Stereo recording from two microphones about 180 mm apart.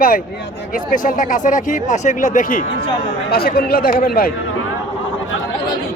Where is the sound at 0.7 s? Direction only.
50° left (ahead or behind).